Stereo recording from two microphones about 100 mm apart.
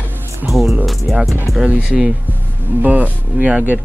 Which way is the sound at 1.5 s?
10° right (ahead or behind).